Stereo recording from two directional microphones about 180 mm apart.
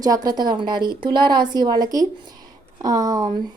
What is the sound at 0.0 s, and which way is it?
A woman's voice, 20° right (ahead or behind).